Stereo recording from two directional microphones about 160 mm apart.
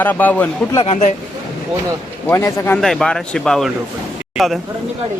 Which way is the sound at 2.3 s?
15° left (ahead or behind).